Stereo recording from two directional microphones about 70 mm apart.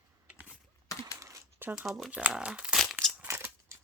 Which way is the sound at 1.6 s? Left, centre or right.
Right.